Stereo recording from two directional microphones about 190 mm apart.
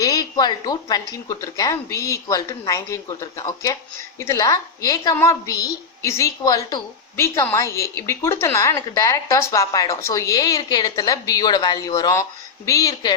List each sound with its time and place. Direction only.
0.0 s a woman's voice: 20° left (ahead or behind)